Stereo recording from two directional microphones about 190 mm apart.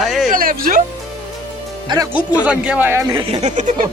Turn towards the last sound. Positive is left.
turn(degrees=-40)  # may be behind; listen again after turning